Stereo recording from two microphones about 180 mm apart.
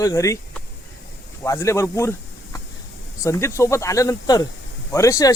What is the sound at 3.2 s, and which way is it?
Speech, 15° left (ahead or behind).